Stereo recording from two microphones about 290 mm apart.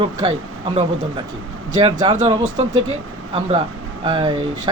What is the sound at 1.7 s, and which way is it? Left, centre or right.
Speech, centre.